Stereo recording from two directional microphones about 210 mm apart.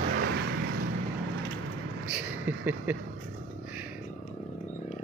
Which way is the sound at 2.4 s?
10° right (ahead or behind).